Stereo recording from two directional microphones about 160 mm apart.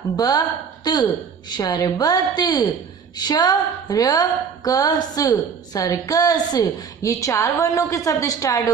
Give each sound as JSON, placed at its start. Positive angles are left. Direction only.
{"t": 0.1, "sound": "a woman's voice", "side_deg": 25}